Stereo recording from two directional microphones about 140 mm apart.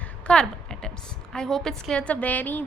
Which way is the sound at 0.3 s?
5° left (ahead or behind).